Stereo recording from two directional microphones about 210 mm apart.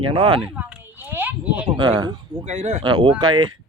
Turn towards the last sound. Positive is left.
turn(degrees=-90)